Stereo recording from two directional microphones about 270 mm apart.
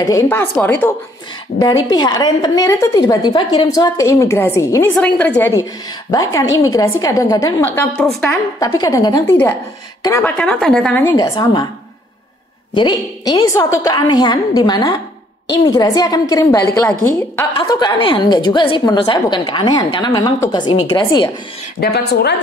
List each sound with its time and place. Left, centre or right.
0.0 s a woman's voice: centre
12.7 s a woman's voice: centre
21.7 s a woman's voice: left